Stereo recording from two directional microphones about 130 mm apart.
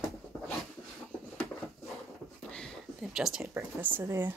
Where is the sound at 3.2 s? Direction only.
5° right (ahead or behind).